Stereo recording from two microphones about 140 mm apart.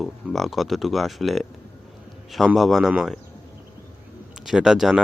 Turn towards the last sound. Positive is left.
turn(degrees=0)  # may be behind; listen again after turning